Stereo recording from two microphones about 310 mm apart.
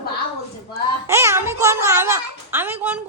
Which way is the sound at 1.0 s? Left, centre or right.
Centre.